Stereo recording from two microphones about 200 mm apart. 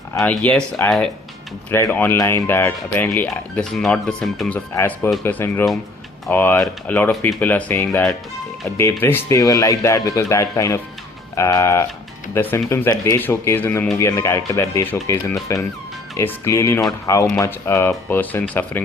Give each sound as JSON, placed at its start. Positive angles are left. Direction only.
{"t": 0.2, "sound": "speech", "side_deg": 5}